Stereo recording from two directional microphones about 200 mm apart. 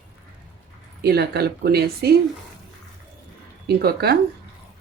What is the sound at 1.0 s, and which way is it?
Speech, 55° right (ahead or behind).